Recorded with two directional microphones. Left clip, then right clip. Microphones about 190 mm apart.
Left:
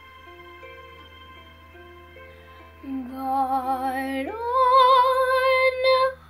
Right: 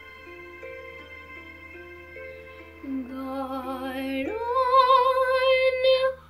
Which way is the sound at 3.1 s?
15° left (ahead or behind).